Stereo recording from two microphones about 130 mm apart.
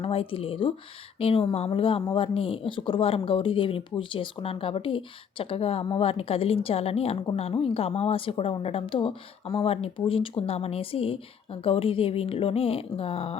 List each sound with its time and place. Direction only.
0.0 s speech: 45° left (ahead or behind)